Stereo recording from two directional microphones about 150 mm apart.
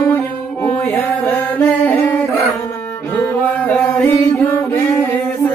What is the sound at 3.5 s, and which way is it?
Mantra, 10° left (ahead or behind).